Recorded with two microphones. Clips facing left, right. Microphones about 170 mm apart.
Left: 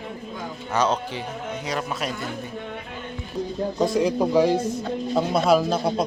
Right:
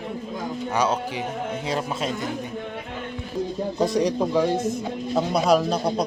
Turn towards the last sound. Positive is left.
turn(degrees=0)  # may be behind; listen again after turning